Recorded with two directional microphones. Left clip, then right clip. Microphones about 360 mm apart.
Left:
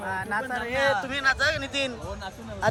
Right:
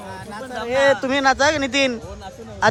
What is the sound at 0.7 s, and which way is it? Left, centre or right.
A man's voice, centre.